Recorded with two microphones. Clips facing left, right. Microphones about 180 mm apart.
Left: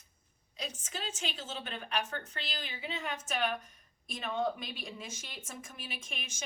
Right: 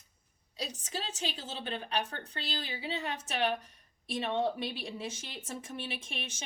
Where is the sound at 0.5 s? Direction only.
35° right (ahead or behind).